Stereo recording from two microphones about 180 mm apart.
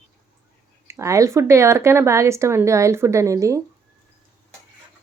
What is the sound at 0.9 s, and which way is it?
Speech, 15° right (ahead or behind).